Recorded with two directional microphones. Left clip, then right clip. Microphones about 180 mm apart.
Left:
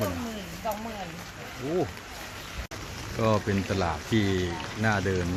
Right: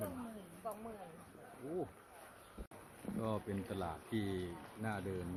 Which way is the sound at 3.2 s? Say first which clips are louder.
Left 16 dB; centre (ahead or behind).